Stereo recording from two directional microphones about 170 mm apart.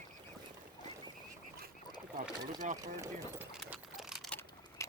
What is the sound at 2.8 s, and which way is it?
Speech, 20° right (ahead or behind).